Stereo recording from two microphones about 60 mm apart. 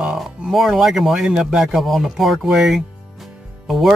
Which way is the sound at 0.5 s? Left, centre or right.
Centre.